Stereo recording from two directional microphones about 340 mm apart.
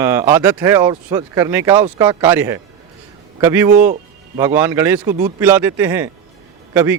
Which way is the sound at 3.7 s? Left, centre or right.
Right.